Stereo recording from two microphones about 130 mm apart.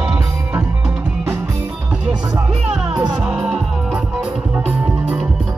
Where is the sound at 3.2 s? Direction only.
5° right (ahead or behind).